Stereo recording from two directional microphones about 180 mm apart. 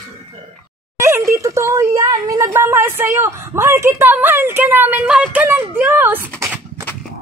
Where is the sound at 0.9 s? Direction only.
15° right (ahead or behind).